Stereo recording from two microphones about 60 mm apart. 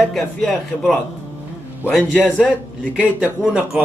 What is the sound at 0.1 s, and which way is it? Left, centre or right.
Speech, centre.